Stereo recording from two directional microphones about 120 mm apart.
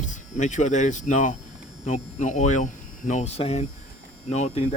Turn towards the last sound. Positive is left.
turn(degrees=65)  # may be behind; listen again after turning